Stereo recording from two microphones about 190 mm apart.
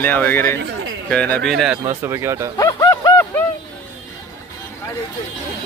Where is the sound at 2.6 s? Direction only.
20° left (ahead or behind).